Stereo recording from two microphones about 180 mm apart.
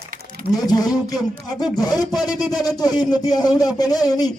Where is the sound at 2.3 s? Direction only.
Centre (ahead or behind).